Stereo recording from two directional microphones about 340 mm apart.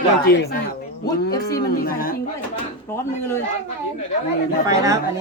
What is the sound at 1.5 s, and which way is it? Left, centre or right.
Speech, left.